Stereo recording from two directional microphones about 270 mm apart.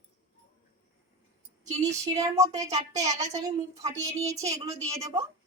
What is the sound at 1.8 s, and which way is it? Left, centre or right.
A woman's voice, centre.